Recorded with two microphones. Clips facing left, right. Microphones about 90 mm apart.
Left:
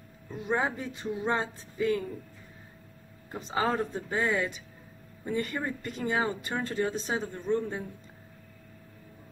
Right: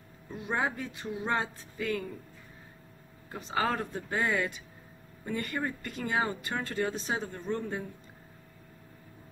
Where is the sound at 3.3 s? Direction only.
20° left (ahead or behind).